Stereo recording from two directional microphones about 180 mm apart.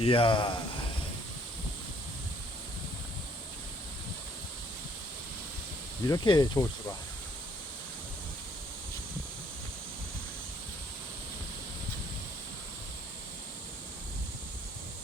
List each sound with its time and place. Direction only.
0.0 s speech: 30° left (ahead or behind)
6.1 s speech: 20° left (ahead or behind)